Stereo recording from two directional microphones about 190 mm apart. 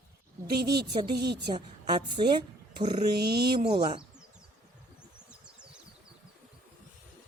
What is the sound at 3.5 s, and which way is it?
Speech, 25° right (ahead or behind).